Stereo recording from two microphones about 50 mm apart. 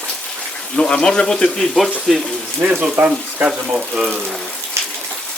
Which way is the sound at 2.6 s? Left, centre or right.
Right.